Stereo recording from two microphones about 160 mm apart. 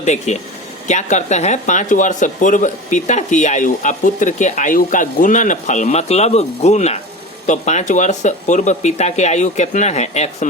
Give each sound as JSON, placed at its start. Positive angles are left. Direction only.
{"t": 0.0, "sound": "speech", "side_deg": 45}